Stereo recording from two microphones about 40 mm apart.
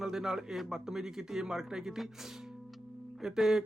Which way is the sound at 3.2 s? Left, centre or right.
Centre.